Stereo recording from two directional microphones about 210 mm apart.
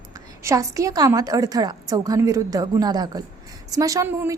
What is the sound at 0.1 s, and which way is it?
A woman's voice, 15° right (ahead or behind).